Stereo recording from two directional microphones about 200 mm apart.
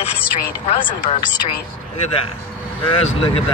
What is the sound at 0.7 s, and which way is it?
Speech, 25° left (ahead or behind).